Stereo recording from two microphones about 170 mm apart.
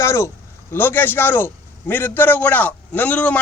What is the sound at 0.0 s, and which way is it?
A man's voice, 15° left (ahead or behind).